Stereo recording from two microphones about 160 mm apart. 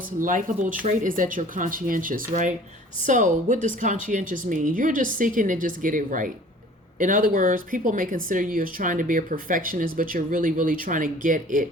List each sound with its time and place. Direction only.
0.2 s a woman's voice: 55° right (ahead or behind)